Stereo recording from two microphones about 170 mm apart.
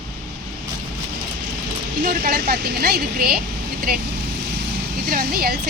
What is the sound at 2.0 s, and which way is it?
Speech, 60° right (ahead or behind).